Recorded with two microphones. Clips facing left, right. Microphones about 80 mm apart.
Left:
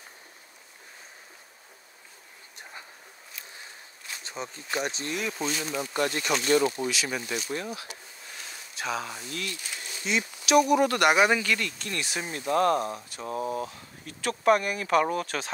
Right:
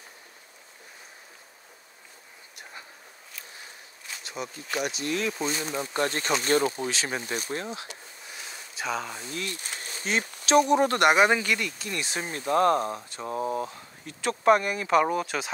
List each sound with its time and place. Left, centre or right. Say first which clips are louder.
4.2 s speech: right 2 dB; left
5.5 s speech: right 1 dB; right
8.7 s speech: right 1 dB; centre
9.3 s speech: right 1 dB; right
11.5 s speech: even; centre
12.0 s speech: right 1 dB; right; by 15.5 s centre